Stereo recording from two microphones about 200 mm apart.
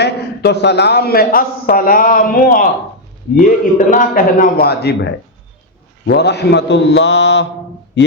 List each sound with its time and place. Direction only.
0.0 s a man's voice: 55° left (ahead or behind)